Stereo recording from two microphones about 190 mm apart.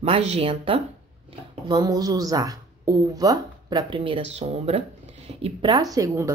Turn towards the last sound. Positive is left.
turn(degrees=-15)  # may be behind; listen again after turning